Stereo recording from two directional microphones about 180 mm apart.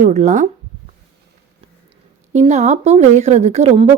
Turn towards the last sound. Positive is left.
turn(degrees=-40)  # may be behind; listen again after turning